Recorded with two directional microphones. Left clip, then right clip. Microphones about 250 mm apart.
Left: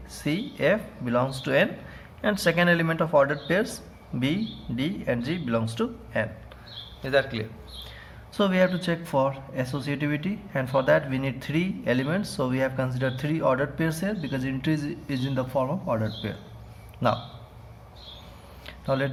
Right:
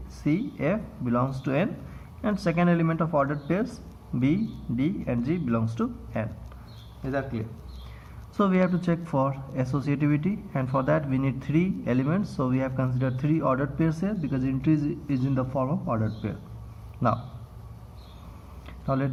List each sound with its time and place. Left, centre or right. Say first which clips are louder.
0.1 s speech: right 2 dB; left
4.8 s speech: left 1 dB; left
7.0 s a man's voice: left 6 dB; left
8.4 s speech: left 2 dB; left
18.6 s a sound: left 2 dB; left